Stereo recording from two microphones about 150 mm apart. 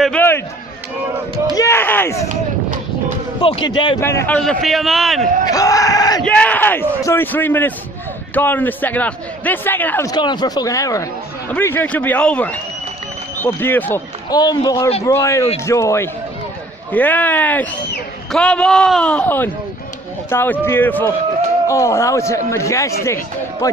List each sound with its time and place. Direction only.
0.0 s a sound: 10° left (ahead or behind)
1.5 s a sound: 20° left (ahead or behind)
3.3 s a man's voice: 35° left (ahead or behind)
4.0 s a man's voice: 15° left (ahead or behind)
4.4 s a man's voice: centre (ahead or behind)
5.4 s a man's voice: 25° left (ahead or behind)
6.2 s a man's voice: 10° left (ahead or behind)
10.0 s a man's voice: 30° left (ahead or behind); by 14.0 s 15° left (ahead or behind)
14.3 s a man's voice: 25° left (ahead or behind)